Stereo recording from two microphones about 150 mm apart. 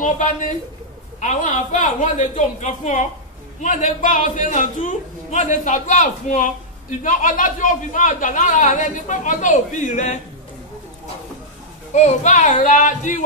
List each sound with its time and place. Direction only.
0.0 s a woman's voice: 60° left (ahead or behind)
11.9 s speech: 50° left (ahead or behind)